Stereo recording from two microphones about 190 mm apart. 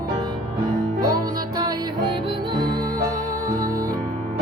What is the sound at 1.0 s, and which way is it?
Music, 20° right (ahead or behind).